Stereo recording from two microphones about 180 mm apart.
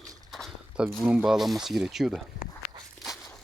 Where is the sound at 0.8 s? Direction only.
5° right (ahead or behind).